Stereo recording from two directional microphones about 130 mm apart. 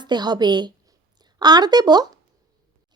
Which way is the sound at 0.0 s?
35° right (ahead or behind).